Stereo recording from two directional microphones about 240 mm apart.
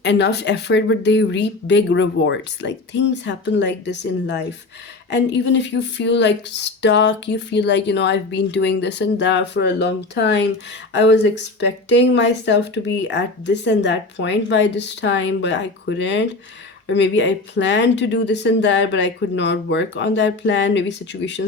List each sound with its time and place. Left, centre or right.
0.0 s speech: left